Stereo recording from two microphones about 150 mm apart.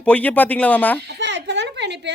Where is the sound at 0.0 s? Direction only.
10° left (ahead or behind).